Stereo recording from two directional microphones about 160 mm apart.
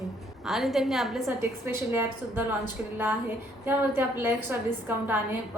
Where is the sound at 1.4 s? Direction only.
15° right (ahead or behind).